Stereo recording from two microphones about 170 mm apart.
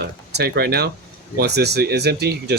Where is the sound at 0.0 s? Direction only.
65° right (ahead or behind).